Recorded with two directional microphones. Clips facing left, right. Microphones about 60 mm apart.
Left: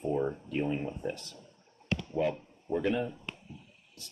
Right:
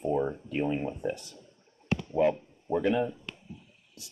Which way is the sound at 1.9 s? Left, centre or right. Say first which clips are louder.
Right 5 dB; right.